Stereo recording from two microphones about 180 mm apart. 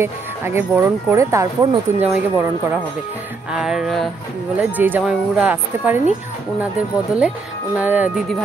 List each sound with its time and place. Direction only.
0.0 s speech: 15° right (ahead or behind)
2.0 s speech: 5° right (ahead or behind)
3.5 s music: centre (ahead or behind)
4.6 s speech: 10° right (ahead or behind)
7.2 s speech: 5° right (ahead or behind)